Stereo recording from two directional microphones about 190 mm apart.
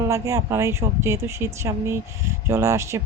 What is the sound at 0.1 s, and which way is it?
Speech, 15° right (ahead or behind).